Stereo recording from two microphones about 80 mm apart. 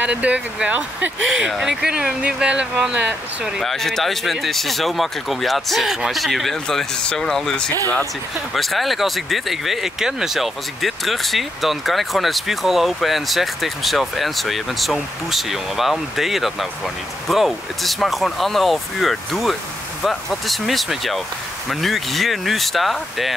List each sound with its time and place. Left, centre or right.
0.0 s speech: centre
1.5 s speech: centre
3.6 s speech: centre